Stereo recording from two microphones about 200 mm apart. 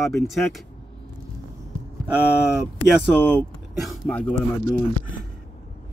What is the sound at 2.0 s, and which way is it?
Speech, 5° right (ahead or behind).